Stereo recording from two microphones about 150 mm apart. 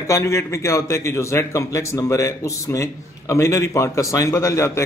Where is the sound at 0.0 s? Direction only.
20° left (ahead or behind).